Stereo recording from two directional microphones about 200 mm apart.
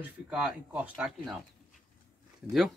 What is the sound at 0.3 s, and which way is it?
Speech, 5° right (ahead or behind).